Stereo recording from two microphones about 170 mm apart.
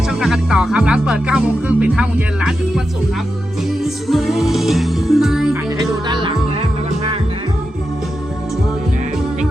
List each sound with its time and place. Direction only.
0.1 s music: 5° right (ahead or behind)
6.1 s music: 30° right (ahead or behind)